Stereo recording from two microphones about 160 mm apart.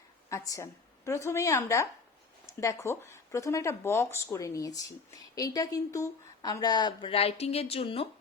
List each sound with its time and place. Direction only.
0.3 s speech: 20° left (ahead or behind); by 8.0 s 35° left (ahead or behind)